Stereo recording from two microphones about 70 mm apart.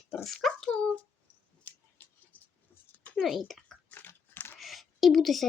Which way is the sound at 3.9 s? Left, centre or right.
Left.